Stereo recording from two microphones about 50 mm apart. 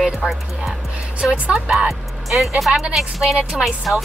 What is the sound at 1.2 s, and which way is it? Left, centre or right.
Speech, centre.